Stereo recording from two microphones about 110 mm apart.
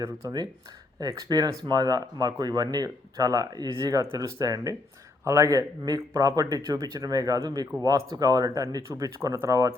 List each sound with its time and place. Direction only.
0.0 s speech: 25° right (ahead or behind)